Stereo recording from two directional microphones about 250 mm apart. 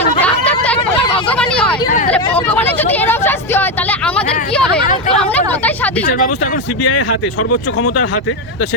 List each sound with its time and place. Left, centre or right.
0.2 s a sound: centre
1.3 s hubbub: centre
2.3 s vehicle: centre
7.8 s speech: left